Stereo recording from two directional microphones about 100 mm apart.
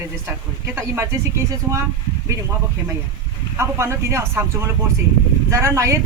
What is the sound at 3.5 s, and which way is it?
Speech, 30° right (ahead or behind).